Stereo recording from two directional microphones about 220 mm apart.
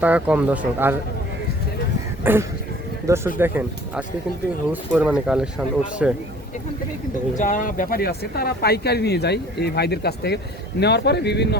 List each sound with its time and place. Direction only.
0.0 s speech: 5° right (ahead or behind)
2.2 s speech: 10° right (ahead or behind)
7.3 s speech: 35° left (ahead or behind)